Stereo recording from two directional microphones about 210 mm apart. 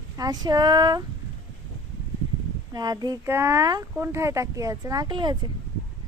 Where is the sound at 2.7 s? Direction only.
20° right (ahead or behind).